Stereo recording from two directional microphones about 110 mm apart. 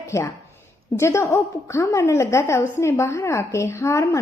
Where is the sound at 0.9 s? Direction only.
25° left (ahead or behind).